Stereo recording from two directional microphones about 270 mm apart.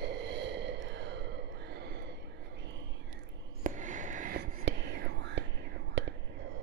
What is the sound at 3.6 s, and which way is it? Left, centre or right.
Whispering, right.